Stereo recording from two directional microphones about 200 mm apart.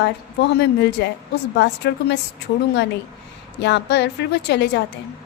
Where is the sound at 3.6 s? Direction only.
60° left (ahead or behind).